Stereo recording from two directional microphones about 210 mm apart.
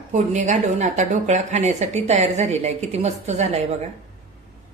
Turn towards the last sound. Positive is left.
turn(degrees=-30)  # may be behind; listen again after turning